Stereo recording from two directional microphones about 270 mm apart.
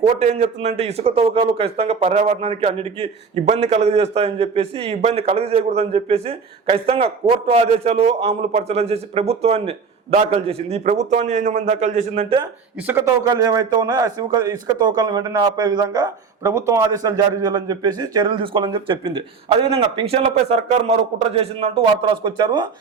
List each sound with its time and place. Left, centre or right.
0.1 s a man's voice: right
12.9 s a man's voice: centre